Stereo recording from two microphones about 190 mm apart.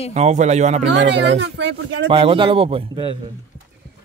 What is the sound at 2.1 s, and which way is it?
Speech, 30° right (ahead or behind).